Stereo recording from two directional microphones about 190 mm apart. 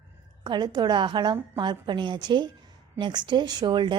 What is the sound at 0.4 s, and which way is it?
Speech, 25° right (ahead or behind).